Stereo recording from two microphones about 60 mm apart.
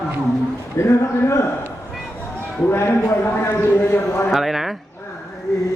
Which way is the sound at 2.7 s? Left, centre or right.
Left.